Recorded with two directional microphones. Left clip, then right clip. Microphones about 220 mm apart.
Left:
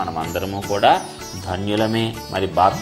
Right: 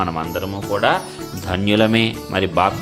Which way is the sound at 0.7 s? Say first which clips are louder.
Left 2 dB; 10° right (ahead or behind).